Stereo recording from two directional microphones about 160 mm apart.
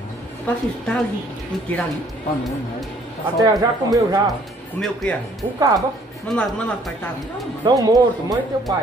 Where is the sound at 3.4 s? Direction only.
20° right (ahead or behind).